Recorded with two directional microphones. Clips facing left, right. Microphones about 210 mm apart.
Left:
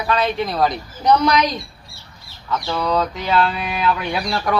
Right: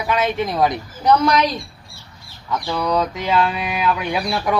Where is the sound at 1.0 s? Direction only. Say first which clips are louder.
Even; 5° right (ahead or behind).